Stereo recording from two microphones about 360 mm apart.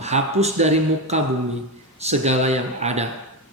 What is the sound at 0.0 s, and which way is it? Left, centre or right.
Speech, centre.